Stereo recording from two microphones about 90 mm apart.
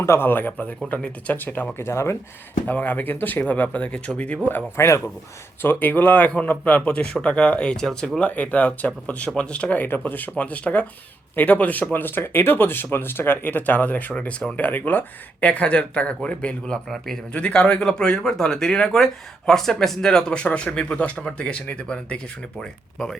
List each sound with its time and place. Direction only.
0.0 s speech: 25° left (ahead or behind)
2.6 s speech: 20° left (ahead or behind)
8.2 s speech: 15° left (ahead or behind)